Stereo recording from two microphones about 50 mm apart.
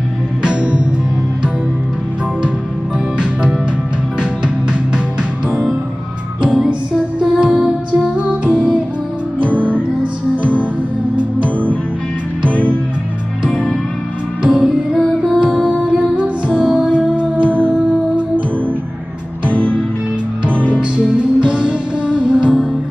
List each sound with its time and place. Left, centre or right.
0.4 s music: right
6.4 s music: right
9.5 s music: left
13.5 s music: centre
14.4 s music: right
20.5 s music: left
21.0 s music: right